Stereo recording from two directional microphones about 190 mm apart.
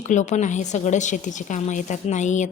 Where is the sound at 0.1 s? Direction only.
40° left (ahead or behind).